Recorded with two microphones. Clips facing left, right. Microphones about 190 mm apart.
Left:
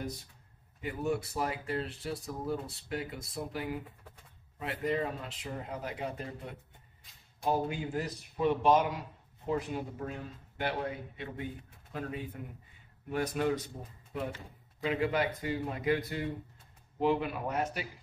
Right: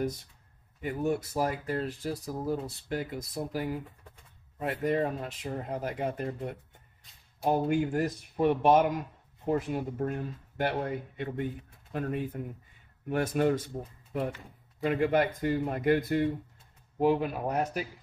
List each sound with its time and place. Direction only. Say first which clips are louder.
0.8 s speech: right 3 dB; 45° right (ahead or behind)
4.6 s speech: right 4 dB; 45° right (ahead or behind)
14.8 s speech: right 5 dB; 50° right (ahead or behind)